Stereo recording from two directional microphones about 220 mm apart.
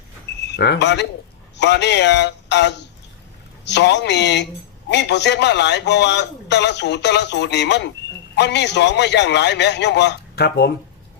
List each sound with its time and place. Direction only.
0.5 s a man's voice: 50° left (ahead or behind)